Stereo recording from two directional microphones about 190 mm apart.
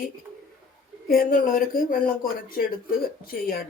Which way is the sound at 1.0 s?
50° left (ahead or behind).